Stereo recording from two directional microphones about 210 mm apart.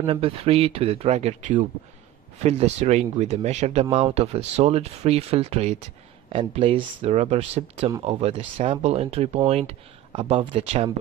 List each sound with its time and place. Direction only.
0.0 s speech: 30° right (ahead or behind)